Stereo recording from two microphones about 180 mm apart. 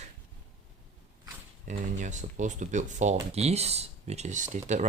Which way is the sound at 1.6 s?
45° right (ahead or behind).